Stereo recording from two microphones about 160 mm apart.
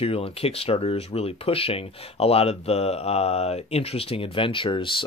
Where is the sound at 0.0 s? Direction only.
35° left (ahead or behind).